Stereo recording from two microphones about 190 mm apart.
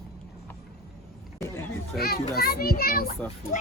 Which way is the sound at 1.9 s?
55° left (ahead or behind).